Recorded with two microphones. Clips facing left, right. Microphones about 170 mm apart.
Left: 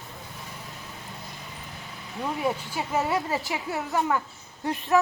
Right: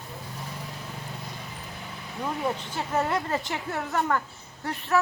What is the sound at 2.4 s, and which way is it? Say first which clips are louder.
Speech: left 1 dB; 10° left (ahead or behind).